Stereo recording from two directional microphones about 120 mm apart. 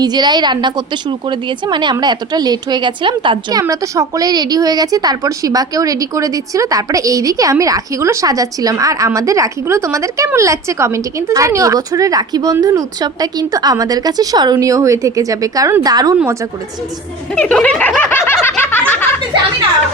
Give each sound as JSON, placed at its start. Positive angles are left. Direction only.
{"t": 0.0, "sound": "a woman's voice", "side_deg": -35}
{"t": 3.6, "sound": "a woman's voice", "side_deg": -25}
{"t": 17.3, "sound": "snicker", "side_deg": 10}